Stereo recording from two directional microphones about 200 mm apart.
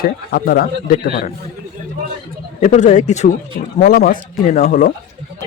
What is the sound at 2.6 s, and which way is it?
Speech, 35° left (ahead or behind).